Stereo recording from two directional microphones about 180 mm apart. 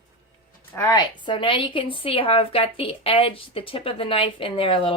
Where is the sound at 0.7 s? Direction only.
15° left (ahead or behind).